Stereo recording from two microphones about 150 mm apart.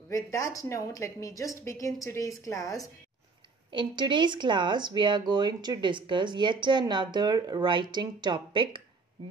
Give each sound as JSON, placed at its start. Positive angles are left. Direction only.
{"t": 0.1, "sound": "a woman's voice", "side_deg": 20}
{"t": 3.7, "sound": "speech", "side_deg": -30}